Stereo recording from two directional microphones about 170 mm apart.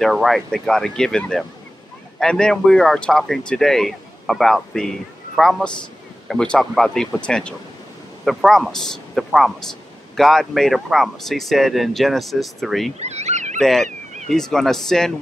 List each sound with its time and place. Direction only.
0.0 s speech: centre (ahead or behind)
13.0 s speech: 40° right (ahead or behind)
13.6 s goose: centre (ahead or behind)
13.8 s a sound: 45° right (ahead or behind)
14.3 s speech: 5° left (ahead or behind)